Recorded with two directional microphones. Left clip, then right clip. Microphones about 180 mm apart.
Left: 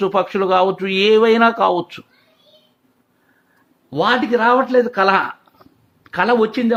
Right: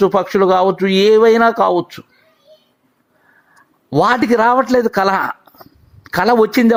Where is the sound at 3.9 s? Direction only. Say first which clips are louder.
Right 3 dB; 45° right (ahead or behind).